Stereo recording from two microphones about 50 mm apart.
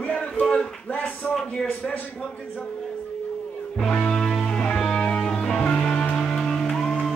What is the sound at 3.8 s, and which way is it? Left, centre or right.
Music, centre.